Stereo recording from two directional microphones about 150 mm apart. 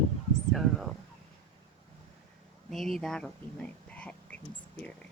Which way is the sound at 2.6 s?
Centre (ahead or behind).